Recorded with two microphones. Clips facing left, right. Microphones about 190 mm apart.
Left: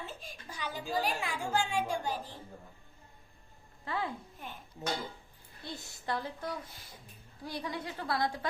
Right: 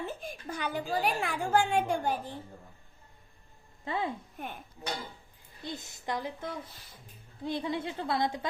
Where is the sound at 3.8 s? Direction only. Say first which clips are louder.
Right 3 dB; 20° right (ahead or behind).